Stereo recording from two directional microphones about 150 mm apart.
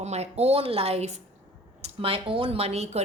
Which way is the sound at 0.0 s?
45° right (ahead or behind).